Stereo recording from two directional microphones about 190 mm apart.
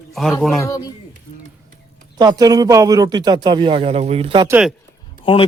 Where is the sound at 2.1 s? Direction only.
20° right (ahead or behind).